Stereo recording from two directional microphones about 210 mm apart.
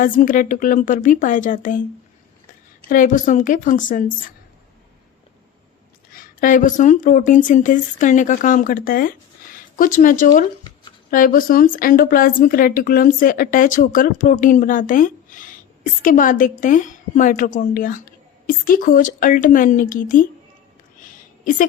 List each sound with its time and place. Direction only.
0.0 s a woman's voice: 40° left (ahead or behind)
2.9 s a woman's voice: 40° left (ahead or behind)
6.4 s a woman's voice: 40° left (ahead or behind)
21.0 s a sound: 40° left (ahead or behind)